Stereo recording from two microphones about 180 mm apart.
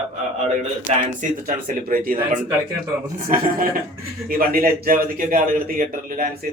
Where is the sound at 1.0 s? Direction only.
50° right (ahead or behind).